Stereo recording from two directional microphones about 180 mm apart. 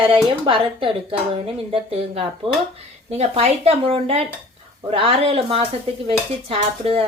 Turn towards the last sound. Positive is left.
turn(degrees=-35)  # may be behind; listen again after turning